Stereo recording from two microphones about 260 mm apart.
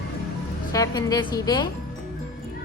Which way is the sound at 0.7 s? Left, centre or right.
Centre.